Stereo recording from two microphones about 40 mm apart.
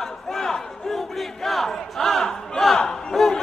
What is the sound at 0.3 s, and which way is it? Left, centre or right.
Battle cry, centre.